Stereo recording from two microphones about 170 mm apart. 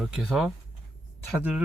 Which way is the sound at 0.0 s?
Centre (ahead or behind).